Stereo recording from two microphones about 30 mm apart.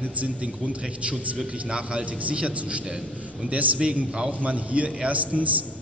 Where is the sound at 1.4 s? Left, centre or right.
Right.